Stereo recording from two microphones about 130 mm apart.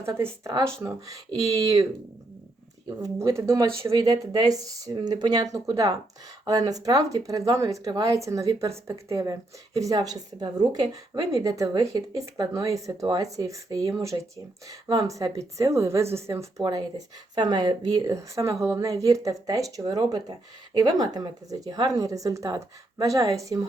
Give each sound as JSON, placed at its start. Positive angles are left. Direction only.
{"t": 0.0, "sound": "speech", "side_deg": -20}
{"t": 3.0, "sound": "speech", "side_deg": -20}
{"t": 17.3, "sound": "speech", "side_deg": -35}